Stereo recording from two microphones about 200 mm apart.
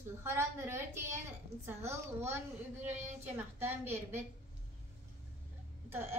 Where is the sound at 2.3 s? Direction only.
10° right (ahead or behind).